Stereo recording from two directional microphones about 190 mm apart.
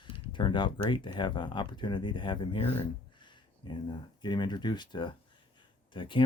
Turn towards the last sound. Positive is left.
turn(degrees=25)  # may be behind; listen again after turning